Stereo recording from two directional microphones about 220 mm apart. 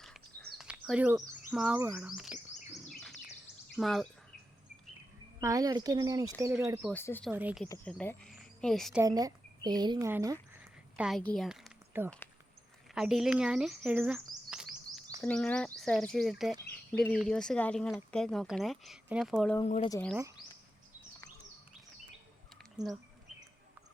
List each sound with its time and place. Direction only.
0.0 s a sound: centre (ahead or behind)
2.9 s bird: centre (ahead or behind)
3.8 s speech: centre (ahead or behind)
5.4 s speech: 15° right (ahead or behind)
6.9 s speech: 10° left (ahead or behind)
7.3 s speech: 5° right (ahead or behind)
9.0 s speech: 15° right (ahead or behind)
10.6 s a sound: 5° right (ahead or behind)
12.9 s speech: centre (ahead or behind)
19.6 s speech: 30° left (ahead or behind)
19.9 s speech: 5° left (ahead or behind)